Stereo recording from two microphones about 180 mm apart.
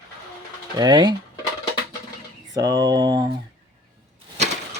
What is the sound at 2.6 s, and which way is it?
Speech, 20° right (ahead or behind).